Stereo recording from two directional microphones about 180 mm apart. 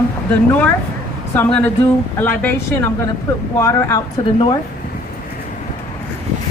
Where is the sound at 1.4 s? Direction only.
5° left (ahead or behind).